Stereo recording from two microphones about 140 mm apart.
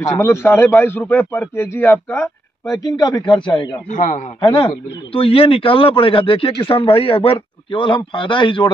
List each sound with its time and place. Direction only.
0.0 s a man's voice: 20° left (ahead or behind)
2.7 s a man's voice: 30° left (ahead or behind)
3.9 s a man's voice: 65° left (ahead or behind)
4.4 s speech: 35° left (ahead or behind)